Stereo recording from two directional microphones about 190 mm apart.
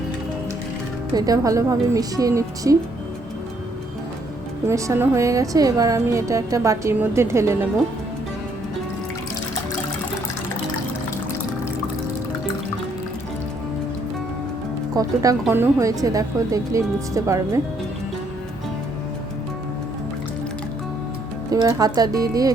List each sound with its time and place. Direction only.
1.1 s a woman's voice: 20° right (ahead or behind)
4.6 s a woman's voice: 15° right (ahead or behind)
14.9 s a woman's voice: 20° right (ahead or behind)
21.5 s a woman's voice: 20° right (ahead or behind)